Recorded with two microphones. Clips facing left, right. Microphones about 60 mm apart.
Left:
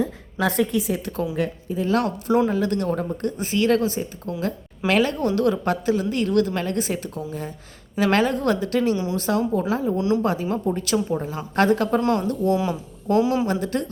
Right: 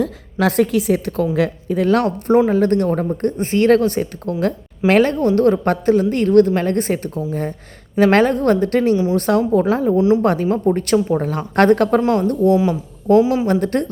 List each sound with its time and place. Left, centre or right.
0.3 s a woman's voice: right
1.4 s speech: right
2.0 s a woman's voice: right
11.9 s speech: right
13.5 s speech: right